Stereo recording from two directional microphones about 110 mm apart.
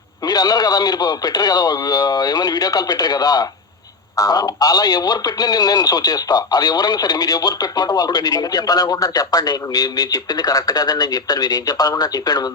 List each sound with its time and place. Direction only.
0.3 s speech: 35° left (ahead or behind)